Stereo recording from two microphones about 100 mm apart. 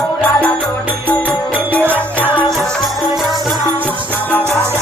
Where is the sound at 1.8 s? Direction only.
20° right (ahead or behind).